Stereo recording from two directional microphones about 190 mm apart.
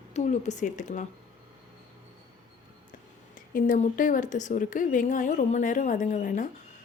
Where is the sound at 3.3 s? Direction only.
45° left (ahead or behind).